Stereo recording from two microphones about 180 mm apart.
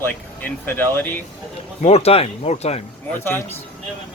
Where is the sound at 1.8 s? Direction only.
35° left (ahead or behind).